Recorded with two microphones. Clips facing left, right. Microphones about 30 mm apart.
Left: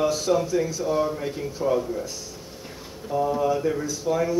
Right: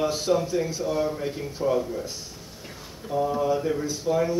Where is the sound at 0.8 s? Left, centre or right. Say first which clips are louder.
Left 2 dB; centre.